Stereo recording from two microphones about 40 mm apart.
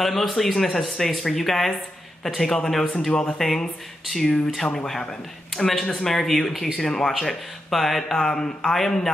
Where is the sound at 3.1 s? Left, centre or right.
Centre.